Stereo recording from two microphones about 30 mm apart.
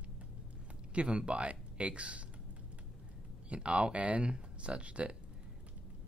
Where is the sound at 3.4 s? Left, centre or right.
Right.